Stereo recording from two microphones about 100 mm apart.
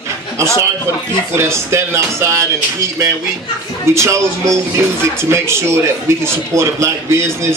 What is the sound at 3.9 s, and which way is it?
A man's voice, 30° right (ahead or behind).